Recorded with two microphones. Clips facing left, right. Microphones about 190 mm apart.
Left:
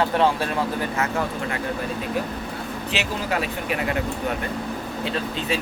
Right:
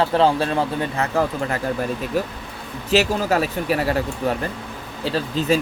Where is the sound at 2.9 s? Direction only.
40° right (ahead or behind).